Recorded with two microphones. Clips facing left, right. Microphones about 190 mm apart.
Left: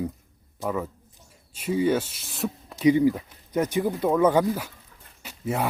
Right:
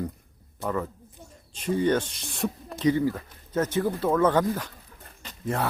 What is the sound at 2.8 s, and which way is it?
Speech, 15° left (ahead or behind).